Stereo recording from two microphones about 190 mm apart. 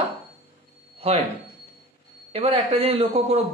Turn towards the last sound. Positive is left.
turn(degrees=-30)  # may be behind; listen again after turning